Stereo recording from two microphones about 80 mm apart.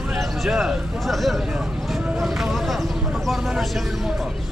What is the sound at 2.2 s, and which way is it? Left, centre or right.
Vehicle, centre.